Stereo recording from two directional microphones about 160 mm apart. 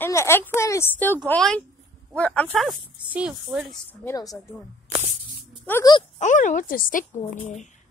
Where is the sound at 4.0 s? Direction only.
20° left (ahead or behind).